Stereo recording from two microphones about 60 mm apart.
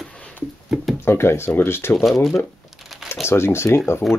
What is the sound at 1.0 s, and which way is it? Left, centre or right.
Speech, left.